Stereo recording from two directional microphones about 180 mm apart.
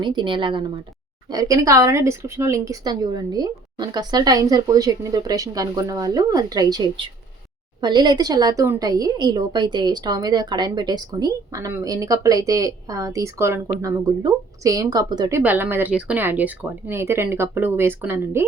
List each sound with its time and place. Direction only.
0.0 s speech: 25° right (ahead or behind)